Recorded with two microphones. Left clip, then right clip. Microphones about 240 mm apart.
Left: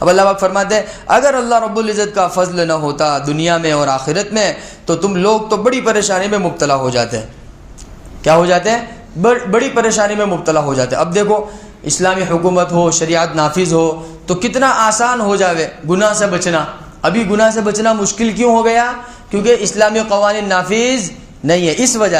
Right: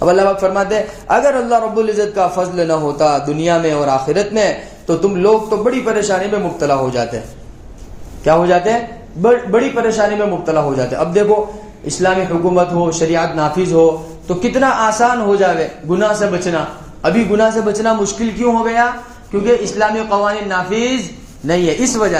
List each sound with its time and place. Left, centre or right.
0.0 s a man's voice: left
8.2 s a man's voice: left